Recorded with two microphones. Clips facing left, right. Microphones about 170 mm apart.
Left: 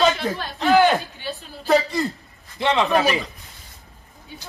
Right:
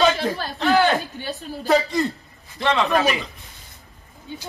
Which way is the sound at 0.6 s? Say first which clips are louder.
Left 2 dB; centre (ahead or behind).